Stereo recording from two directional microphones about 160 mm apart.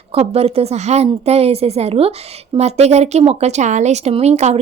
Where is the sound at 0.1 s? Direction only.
40° right (ahead or behind).